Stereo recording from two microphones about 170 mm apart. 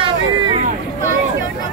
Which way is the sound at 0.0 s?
30° right (ahead or behind).